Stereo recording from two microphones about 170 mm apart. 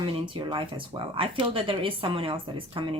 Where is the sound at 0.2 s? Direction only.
30° right (ahead or behind).